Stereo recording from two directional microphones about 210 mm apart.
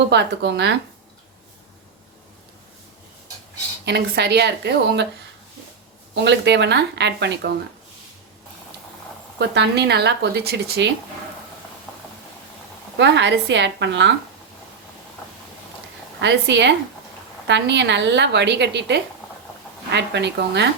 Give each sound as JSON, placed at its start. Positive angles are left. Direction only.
{"t": 0.1, "sound": "a woman's voice", "side_deg": -55}
{"t": 3.8, "sound": "speech", "side_deg": -50}
{"t": 6.1, "sound": "a woman's voice", "side_deg": -55}
{"t": 9.4, "sound": "speech", "side_deg": -55}
{"t": 13.0, "sound": "a woman's voice", "side_deg": -60}
{"t": 16.2, "sound": "a woman's voice", "side_deg": -55}